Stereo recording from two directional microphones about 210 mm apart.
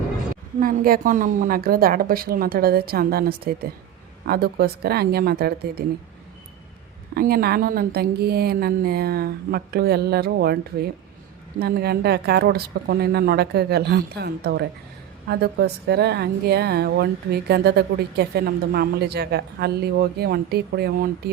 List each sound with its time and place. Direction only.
0.6 s a woman's voice: 40° right (ahead or behind)
7.1 s a woman's voice: 45° right (ahead or behind)
11.6 s a woman's voice: 50° right (ahead or behind)